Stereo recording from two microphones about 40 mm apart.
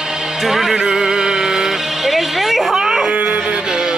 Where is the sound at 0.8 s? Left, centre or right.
Centre.